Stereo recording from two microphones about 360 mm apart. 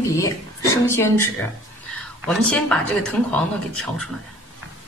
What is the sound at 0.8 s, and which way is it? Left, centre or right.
Speech, centre.